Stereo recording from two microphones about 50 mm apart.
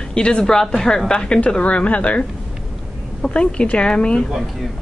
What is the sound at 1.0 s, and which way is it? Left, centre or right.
A woman's voice, centre.